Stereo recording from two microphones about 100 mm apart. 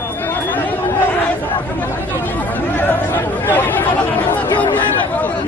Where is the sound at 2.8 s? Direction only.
20° left (ahead or behind).